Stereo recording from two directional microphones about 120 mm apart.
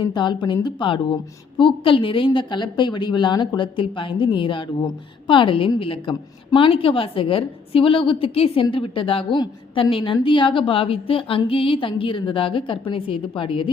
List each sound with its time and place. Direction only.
0.0 s a woman's voice: 40° left (ahead or behind)